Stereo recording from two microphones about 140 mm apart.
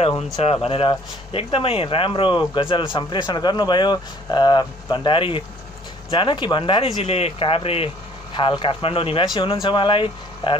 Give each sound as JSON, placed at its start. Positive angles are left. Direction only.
{"t": 0.7, "sound": "speech", "side_deg": 40}